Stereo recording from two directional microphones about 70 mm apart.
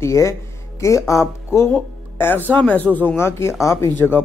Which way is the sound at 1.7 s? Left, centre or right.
Left.